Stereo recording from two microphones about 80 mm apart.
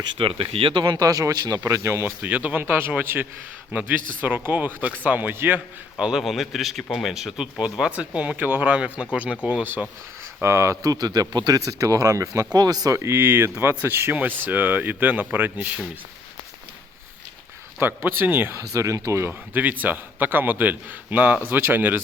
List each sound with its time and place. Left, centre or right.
0.2 s speech: right
2.2 s speech: centre
6.0 s a man's voice: centre; by 9.8 s right
10.4 s speech: right
11.5 s speech: right
12.5 s speech: right
13.0 s speech: right
17.7 s speech: right
18.5 s speech: right
19.3 s speech: right